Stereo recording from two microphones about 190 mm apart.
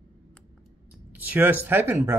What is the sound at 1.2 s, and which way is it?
Speech, 10° right (ahead or behind).